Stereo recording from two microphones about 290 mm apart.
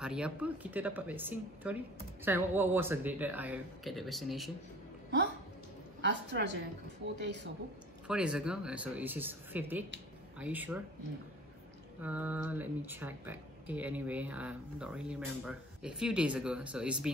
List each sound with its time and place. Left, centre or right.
0.0 s speech: centre
5.9 s a woman's voice: right
8.1 s speech: centre
12.0 s speech: centre